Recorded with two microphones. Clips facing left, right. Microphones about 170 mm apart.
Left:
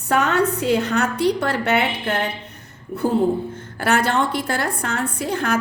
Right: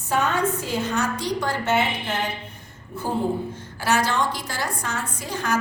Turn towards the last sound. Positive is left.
turn(degrees=60)  # may be behind; listen again after turning